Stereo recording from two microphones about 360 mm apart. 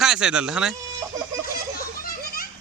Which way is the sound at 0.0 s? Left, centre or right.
Centre.